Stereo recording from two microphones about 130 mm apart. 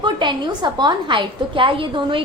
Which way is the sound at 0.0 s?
35° right (ahead or behind).